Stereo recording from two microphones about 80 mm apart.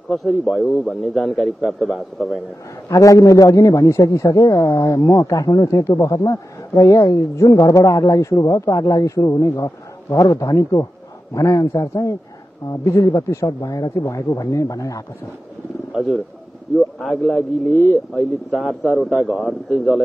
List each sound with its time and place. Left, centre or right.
0.1 s a man's voice: centre
2.9 s a man's voice: left
13.5 s a man's voice: left
16.7 s a man's voice: centre